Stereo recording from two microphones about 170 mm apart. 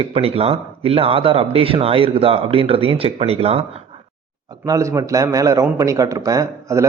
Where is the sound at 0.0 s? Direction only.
35° right (ahead or behind).